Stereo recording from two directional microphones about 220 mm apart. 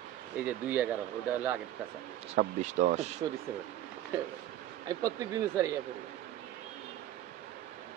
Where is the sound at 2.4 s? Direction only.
35° right (ahead or behind).